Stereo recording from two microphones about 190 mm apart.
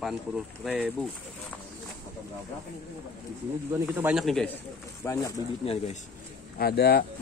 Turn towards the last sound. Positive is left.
turn(degrees=55)  # may be behind; listen again after turning